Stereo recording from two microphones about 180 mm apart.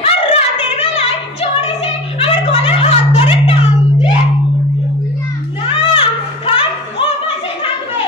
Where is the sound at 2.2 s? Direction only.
30° left (ahead or behind).